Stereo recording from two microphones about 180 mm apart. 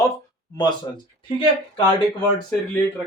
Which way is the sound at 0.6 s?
25° left (ahead or behind).